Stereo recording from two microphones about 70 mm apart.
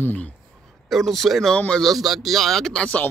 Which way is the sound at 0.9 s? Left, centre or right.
Centre.